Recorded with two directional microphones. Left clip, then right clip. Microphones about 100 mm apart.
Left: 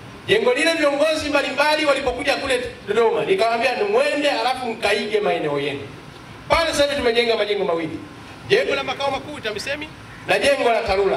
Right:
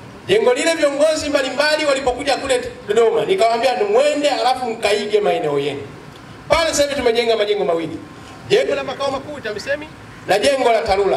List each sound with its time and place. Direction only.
0.3 s a man's voice: 35° right (ahead or behind)
8.6 s a man's voice: centre (ahead or behind)
10.3 s a man's voice: 35° right (ahead or behind)